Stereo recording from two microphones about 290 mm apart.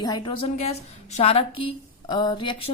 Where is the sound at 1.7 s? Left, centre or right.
Centre.